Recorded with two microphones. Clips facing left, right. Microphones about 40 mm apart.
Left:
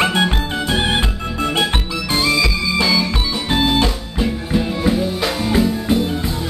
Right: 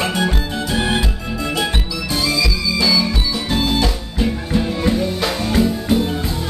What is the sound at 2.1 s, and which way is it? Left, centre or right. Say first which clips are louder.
Music: left 3 dB; left.